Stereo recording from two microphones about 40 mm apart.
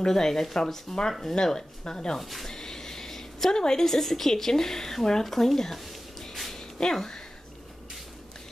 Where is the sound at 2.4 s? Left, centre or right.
Centre.